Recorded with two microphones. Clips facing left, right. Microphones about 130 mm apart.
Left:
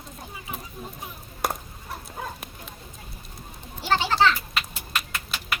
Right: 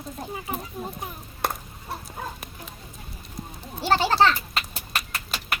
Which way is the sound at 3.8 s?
40° right (ahead or behind).